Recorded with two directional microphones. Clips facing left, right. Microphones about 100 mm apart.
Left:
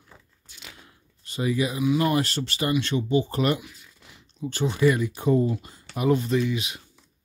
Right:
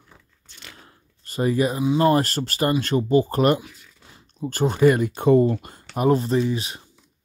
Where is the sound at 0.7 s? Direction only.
40° right (ahead or behind).